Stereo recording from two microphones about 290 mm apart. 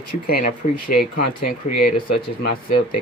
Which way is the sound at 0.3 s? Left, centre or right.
Left.